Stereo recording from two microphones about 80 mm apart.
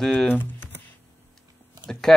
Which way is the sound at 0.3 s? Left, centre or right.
Left.